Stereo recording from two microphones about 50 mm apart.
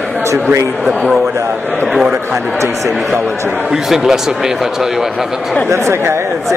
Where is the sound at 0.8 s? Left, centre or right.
Centre.